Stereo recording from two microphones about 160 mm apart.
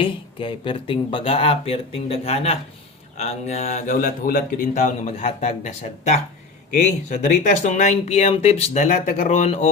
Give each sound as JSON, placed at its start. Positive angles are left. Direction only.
{"t": 0.0, "sound": "speech", "side_deg": 35}
{"t": 4.7, "sound": "speech", "side_deg": 50}
{"t": 7.3, "sound": "speech", "side_deg": 60}